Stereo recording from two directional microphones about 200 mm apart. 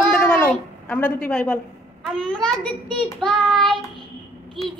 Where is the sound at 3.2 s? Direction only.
Centre (ahead or behind).